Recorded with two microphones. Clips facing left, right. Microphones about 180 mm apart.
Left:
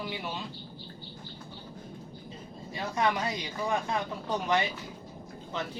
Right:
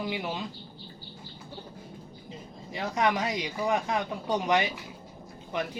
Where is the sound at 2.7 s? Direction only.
20° right (ahead or behind).